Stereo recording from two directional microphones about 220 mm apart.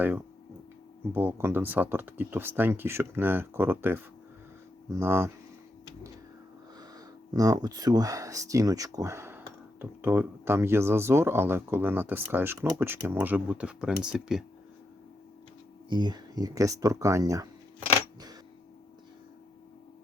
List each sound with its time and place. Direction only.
1.1 s speech: 10° right (ahead or behind)
6.7 s speech: 15° right (ahead or behind)
15.9 s speech: 20° right (ahead or behind)